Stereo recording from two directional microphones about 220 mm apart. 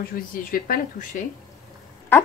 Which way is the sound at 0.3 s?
40° left (ahead or behind).